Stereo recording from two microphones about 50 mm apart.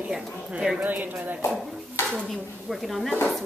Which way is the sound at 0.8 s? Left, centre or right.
Right.